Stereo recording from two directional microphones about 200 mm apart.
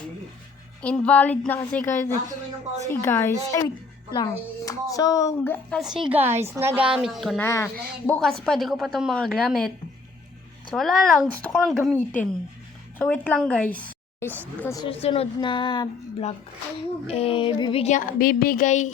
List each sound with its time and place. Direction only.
0.8 s a woman's voice: 5° left (ahead or behind)
5.4 s a woman's voice: 5° left (ahead or behind)
7.4 s a woman's voice: 10° left (ahead or behind)
14.8 s a woman's voice: 30° left (ahead or behind)
17.1 s a sound: 30° left (ahead or behind)